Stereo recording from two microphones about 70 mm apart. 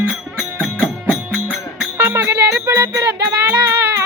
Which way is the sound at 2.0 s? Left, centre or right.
Right.